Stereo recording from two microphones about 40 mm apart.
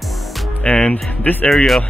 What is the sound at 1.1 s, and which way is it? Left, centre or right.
Speech, left.